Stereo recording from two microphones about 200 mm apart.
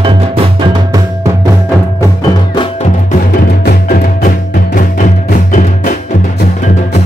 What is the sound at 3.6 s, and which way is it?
Music, 50° left (ahead or behind).